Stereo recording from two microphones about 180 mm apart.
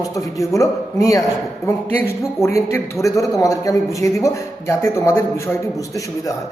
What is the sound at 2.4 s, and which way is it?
A man's voice, 15° left (ahead or behind).